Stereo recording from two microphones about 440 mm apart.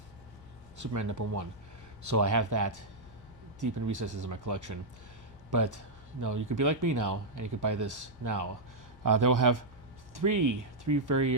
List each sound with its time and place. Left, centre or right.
0.8 s speech: right